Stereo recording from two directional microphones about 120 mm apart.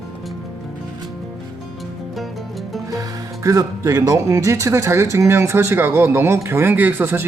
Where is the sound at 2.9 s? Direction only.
30° right (ahead or behind).